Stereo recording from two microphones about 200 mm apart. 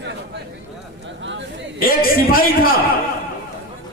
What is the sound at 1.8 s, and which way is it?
Speech, 45° left (ahead or behind).